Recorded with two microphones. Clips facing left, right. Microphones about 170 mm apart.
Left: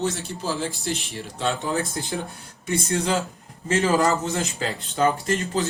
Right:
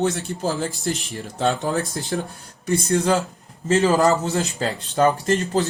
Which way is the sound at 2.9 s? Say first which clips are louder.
Right 5 dB; 40° right (ahead or behind).